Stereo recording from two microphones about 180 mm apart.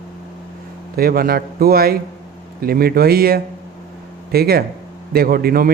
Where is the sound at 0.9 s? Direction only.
55° right (ahead or behind).